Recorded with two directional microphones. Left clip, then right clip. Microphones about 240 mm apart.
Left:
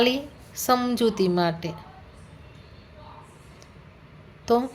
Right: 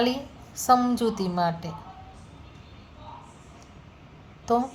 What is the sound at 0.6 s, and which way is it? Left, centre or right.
A woman's voice, left.